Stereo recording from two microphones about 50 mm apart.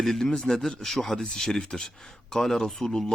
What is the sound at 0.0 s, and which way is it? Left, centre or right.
Speech, centre.